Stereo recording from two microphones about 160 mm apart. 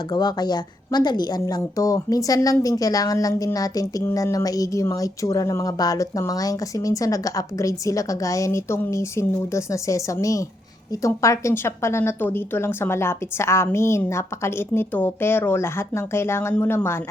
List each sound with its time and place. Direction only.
0.1 s a woman's voice: 25° left (ahead or behind)